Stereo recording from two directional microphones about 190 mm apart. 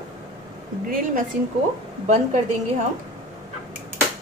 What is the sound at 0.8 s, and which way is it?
Speech, 45° right (ahead or behind).